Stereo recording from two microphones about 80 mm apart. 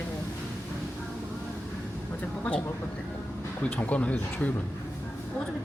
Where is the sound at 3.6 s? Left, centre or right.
Centre.